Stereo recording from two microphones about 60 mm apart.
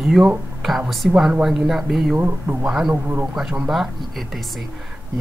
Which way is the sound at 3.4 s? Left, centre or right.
Centre.